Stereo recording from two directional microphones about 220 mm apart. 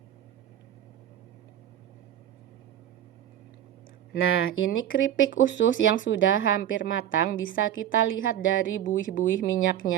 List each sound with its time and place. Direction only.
4.1 s speech: 70° left (ahead or behind)
8.8 s speech: 35° left (ahead or behind)